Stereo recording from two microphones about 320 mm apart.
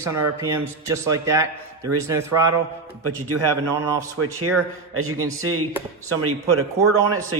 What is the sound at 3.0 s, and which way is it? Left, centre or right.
Speech, right.